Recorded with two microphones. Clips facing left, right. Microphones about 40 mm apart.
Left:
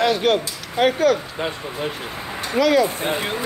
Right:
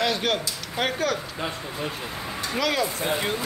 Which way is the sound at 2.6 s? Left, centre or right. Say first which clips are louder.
Left 9 dB; centre.